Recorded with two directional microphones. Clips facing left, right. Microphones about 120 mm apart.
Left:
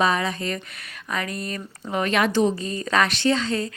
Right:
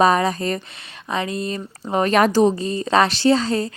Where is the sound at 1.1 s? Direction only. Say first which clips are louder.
Right 5 dB; 25° right (ahead or behind).